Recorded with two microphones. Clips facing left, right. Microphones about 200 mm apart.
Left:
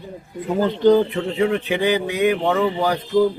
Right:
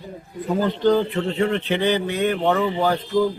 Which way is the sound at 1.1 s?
5° left (ahead or behind).